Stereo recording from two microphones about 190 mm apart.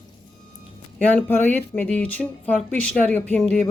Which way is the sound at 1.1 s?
10° left (ahead or behind).